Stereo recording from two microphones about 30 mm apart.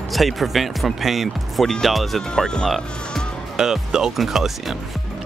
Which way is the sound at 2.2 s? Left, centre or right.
Left.